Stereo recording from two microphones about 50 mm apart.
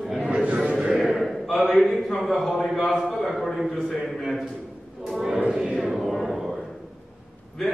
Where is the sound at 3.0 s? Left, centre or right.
Centre.